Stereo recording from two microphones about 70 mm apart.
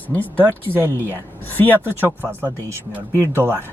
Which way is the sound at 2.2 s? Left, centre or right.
Right.